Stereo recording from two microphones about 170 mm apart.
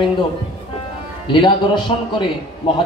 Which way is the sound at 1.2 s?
25° left (ahead or behind).